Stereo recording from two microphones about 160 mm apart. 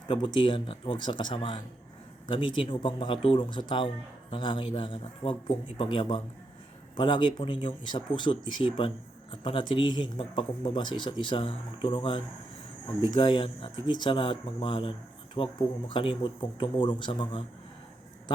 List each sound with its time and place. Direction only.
0.1 s speech: 30° left (ahead or behind)